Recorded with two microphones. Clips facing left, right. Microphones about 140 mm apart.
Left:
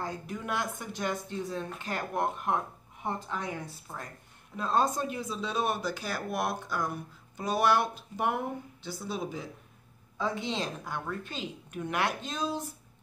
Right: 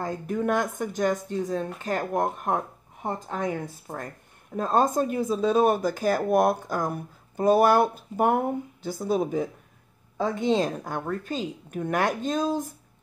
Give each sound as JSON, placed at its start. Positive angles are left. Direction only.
{"t": 0.0, "sound": "speech", "side_deg": -50}